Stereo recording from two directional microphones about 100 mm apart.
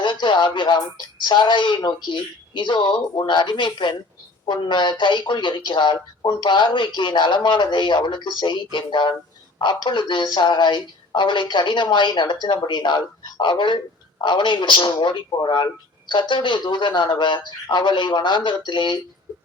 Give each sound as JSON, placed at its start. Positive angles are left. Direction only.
{"t": 0.0, "sound": "speech", "side_deg": 50}